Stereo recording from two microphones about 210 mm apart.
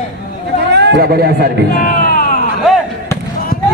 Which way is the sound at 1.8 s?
40° left (ahead or behind).